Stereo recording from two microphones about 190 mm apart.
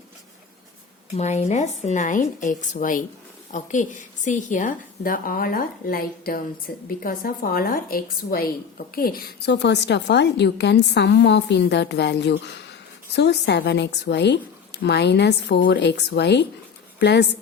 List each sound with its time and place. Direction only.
1.1 s a woman's voice: 35° left (ahead or behind); by 17.2 s 65° left (ahead or behind)